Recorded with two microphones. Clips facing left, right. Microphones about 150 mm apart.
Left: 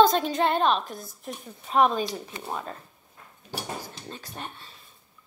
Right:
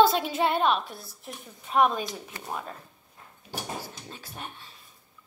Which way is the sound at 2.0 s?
20° left (ahead or behind).